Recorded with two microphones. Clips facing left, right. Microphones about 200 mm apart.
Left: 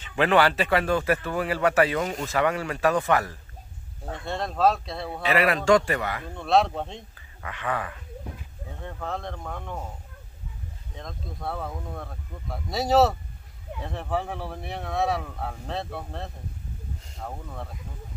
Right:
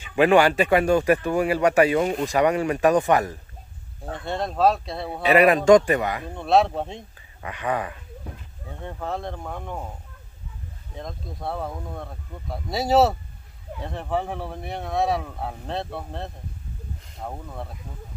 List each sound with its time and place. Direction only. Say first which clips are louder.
0.0 s speech: right 4 dB; 15° right (ahead or behind)
2.0 s speech: right 5 dB; 25° right (ahead or behind)
4.1 s speech: right 3 dB; centre (ahead or behind)
5.0 s speech: right 6 dB; 20° right (ahead or behind)
6.4 s speech: right 2 dB; centre (ahead or behind)
7.4 s speech: right 4 dB; 20° right (ahead or behind)
8.8 s speech: right 3 dB; centre (ahead or behind)
11.0 s speech: right 3 dB; centre (ahead or behind)